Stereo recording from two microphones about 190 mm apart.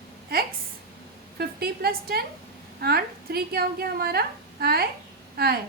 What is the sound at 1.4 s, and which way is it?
A woman's voice, 55° right (ahead or behind).